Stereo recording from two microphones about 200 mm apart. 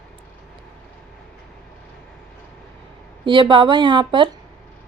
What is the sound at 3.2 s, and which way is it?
A woman's voice, 25° right (ahead or behind).